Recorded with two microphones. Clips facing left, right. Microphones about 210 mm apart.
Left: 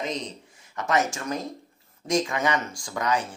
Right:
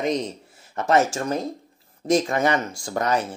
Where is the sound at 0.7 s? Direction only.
35° right (ahead or behind).